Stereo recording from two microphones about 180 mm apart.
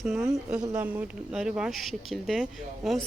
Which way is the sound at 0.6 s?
20° right (ahead or behind).